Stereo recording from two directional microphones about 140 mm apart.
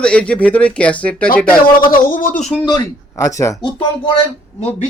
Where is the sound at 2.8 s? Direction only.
25° left (ahead or behind).